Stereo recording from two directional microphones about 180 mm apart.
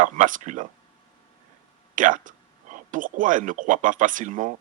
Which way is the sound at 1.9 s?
45° right (ahead or behind).